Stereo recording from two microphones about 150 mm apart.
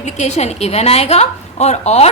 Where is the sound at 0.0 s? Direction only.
50° left (ahead or behind).